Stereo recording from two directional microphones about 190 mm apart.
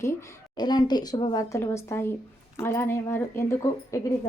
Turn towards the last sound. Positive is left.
turn(degrees=15)  # may be behind; listen again after turning